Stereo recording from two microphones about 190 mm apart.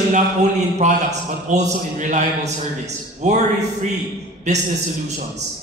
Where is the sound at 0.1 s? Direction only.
40° right (ahead or behind).